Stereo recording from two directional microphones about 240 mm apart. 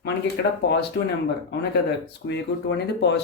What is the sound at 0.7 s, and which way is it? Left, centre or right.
Speech, left.